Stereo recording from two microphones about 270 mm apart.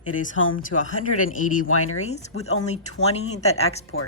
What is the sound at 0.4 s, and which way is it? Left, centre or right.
Speech, left.